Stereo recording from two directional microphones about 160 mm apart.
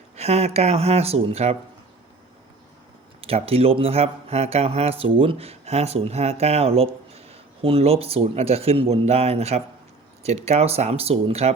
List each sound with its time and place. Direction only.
0.2 s speech: 40° right (ahead or behind)
3.2 s speech: 35° right (ahead or behind)